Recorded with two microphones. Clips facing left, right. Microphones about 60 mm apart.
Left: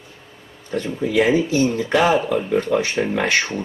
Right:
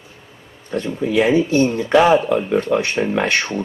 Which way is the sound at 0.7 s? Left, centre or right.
Right.